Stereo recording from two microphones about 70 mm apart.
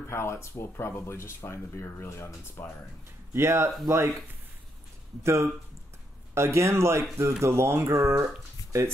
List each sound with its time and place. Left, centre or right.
0.0 s speech: left
3.3 s speech: right
5.2 s speech: right